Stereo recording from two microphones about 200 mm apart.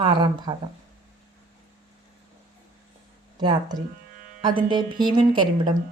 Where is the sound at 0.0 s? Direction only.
25° right (ahead or behind).